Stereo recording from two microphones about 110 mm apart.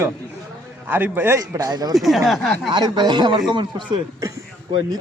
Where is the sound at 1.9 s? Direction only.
Centre (ahead or behind).